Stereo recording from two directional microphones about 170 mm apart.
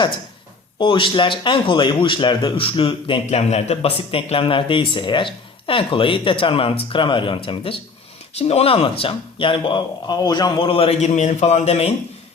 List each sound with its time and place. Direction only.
0.8 s a man's voice: 30° left (ahead or behind)